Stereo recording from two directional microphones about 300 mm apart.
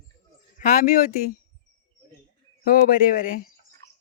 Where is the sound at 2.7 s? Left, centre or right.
Left.